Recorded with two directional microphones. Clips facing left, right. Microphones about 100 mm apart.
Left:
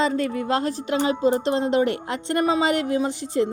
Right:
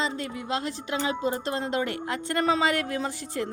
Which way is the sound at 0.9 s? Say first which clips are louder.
Left 7 dB; 30° left (ahead or behind).